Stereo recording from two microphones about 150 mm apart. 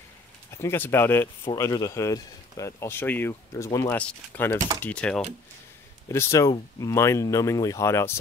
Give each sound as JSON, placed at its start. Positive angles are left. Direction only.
{"t": 0.6, "sound": "speech", "side_deg": 15}
{"t": 6.0, "sound": "speech", "side_deg": 20}